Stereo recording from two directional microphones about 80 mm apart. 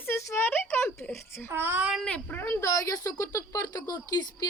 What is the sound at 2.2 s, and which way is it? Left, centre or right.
A woman's voice, left.